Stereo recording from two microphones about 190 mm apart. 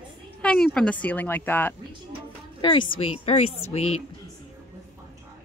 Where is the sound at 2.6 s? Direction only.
25° left (ahead or behind).